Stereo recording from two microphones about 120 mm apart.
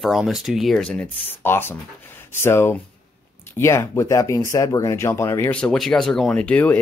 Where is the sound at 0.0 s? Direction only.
Centre (ahead or behind); by 5.5 s 25° left (ahead or behind).